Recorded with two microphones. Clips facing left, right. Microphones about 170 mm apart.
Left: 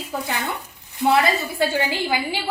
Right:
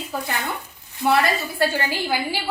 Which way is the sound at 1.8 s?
20° left (ahead or behind).